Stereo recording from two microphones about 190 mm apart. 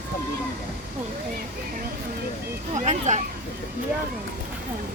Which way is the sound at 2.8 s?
35° right (ahead or behind).